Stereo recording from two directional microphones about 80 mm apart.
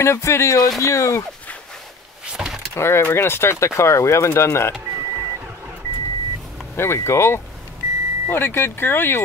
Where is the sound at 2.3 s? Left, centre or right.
Centre.